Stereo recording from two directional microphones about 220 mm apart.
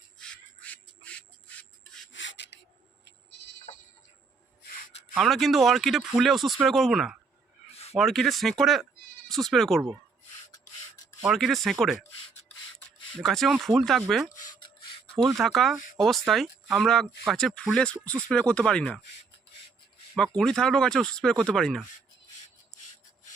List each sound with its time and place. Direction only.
0.2 s rub: 5° left (ahead or behind)
2.1 s rub: 55° left (ahead or behind)
3.0 s bleat: 55° left (ahead or behind)
5.1 s speech: centre (ahead or behind)
11.2 s speech: centre (ahead or behind)
13.1 s speech: centre (ahead or behind)
20.1 s speech: 5° left (ahead or behind)